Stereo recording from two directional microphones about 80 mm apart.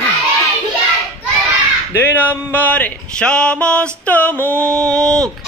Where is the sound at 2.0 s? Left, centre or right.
Left.